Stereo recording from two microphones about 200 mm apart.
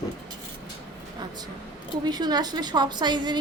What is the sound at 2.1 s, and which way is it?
A woman's voice, 20° right (ahead or behind).